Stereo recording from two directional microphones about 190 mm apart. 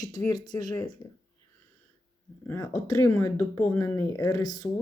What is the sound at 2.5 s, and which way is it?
Speech, 15° left (ahead or behind).